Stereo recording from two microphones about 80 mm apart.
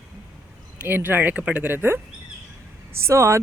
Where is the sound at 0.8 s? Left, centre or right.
Right.